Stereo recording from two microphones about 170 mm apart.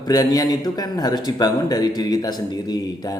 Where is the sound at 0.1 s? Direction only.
20° left (ahead or behind).